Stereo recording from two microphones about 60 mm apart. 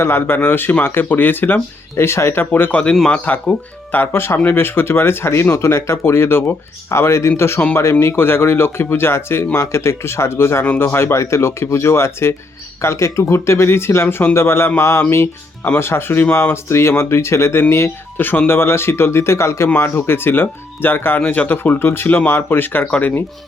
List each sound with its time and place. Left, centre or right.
0.0 s speech: left
2.0 s speech: left
3.9 s speech: left
6.9 s speech: left
11.2 s speech: left
18.2 s speech: left